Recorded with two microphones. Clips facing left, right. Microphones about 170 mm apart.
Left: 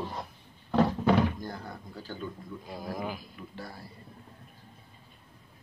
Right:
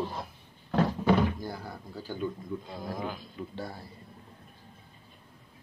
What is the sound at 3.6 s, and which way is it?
Speech, 25° right (ahead or behind).